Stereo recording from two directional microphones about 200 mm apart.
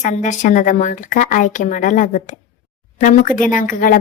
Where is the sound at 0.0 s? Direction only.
35° left (ahead or behind).